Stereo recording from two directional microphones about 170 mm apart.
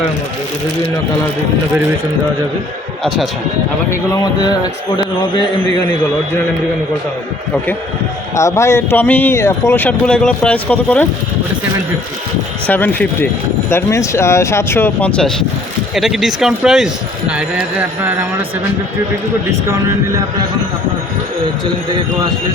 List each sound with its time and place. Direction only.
3.8 s speech: 20° left (ahead or behind)
8.4 s speech: 15° left (ahead or behind)
12.6 s speech: 10° left (ahead or behind); by 18.3 s 10° right (ahead or behind)
19.5 s a man's voice: 15° right (ahead or behind)